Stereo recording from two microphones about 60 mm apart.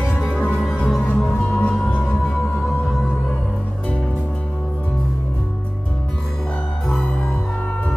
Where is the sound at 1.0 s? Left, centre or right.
Left.